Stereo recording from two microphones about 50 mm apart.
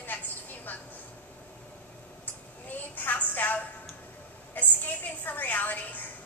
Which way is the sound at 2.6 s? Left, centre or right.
Left.